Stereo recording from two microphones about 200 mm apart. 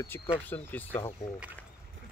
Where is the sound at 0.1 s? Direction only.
10° left (ahead or behind).